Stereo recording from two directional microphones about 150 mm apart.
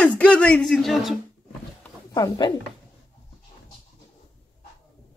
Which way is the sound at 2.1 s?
25° left (ahead or behind).